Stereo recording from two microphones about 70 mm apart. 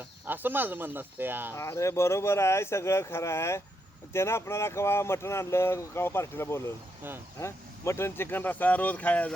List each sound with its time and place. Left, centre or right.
0.3 s speech: right
1.5 s speech: left; by 9.3 s centre